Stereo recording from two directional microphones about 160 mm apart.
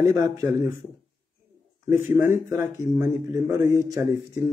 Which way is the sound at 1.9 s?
15° right (ahead or behind).